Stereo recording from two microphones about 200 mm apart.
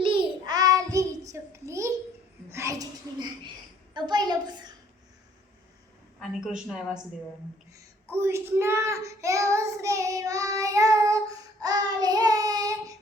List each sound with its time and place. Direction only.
0.0 s child singing: 25° right (ahead or behind)
2.5 s a sound: 15° right (ahead or behind)
6.1 s a woman's voice: centre (ahead or behind)
8.2 s child singing: 15° right (ahead or behind)